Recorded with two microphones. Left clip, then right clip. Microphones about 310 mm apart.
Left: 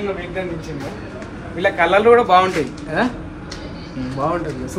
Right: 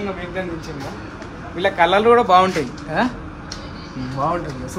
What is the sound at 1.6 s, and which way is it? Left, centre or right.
A man's voice, right.